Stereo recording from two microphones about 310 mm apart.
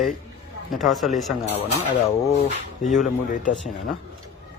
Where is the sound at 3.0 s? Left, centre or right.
Left.